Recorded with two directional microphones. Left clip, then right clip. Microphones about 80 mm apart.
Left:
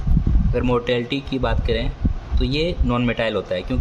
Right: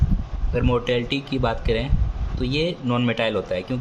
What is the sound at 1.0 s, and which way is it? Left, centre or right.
Speech, centre.